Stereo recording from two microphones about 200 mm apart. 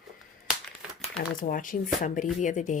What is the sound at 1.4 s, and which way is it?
Speech, 40° left (ahead or behind).